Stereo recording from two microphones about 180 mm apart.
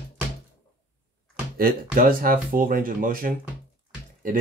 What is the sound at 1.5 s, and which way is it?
Speech, 50° right (ahead or behind).